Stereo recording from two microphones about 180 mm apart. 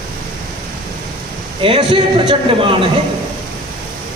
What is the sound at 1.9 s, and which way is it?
Speech, 25° right (ahead or behind).